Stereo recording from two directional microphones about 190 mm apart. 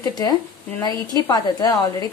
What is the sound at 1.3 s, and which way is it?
Speech, 20° left (ahead or behind).